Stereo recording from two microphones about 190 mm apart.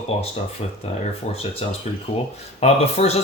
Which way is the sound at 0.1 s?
35° left (ahead or behind).